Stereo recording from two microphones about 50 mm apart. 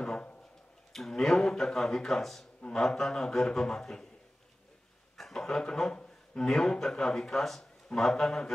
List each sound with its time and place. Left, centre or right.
0.0 s a sound: centre
0.9 s a man's voice: centre
5.1 s speech: centre